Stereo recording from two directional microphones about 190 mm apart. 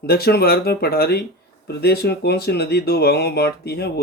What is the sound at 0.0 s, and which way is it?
Speech, 55° left (ahead or behind).